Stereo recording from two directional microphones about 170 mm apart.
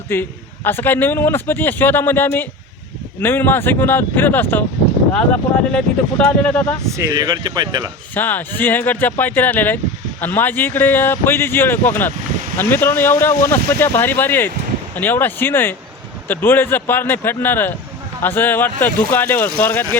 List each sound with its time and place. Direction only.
0.1 s speech: 10° left (ahead or behind)
6.9 s speech: 25° right (ahead or behind)
8.1 s speech: 10° left (ahead or behind)